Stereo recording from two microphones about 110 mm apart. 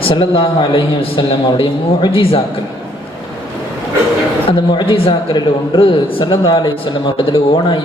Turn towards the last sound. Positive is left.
turn(degrees=50)  # may be behind; listen again after turning